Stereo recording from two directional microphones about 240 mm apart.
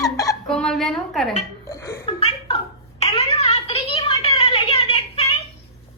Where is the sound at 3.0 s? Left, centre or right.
Left.